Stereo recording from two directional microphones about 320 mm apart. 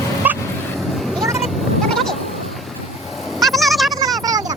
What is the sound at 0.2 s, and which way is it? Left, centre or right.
Vehicle, centre.